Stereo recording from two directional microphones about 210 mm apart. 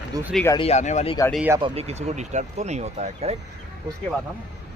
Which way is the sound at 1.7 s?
30° right (ahead or behind).